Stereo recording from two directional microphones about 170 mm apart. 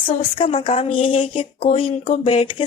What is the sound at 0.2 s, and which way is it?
Speech, 30° left (ahead or behind).